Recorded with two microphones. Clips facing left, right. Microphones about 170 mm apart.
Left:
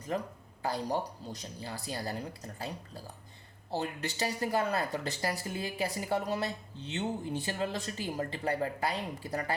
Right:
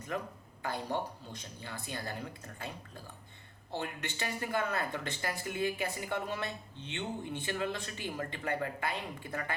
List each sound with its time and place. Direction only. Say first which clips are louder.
0.1 s speech: left 3 dB; 35° left (ahead or behind)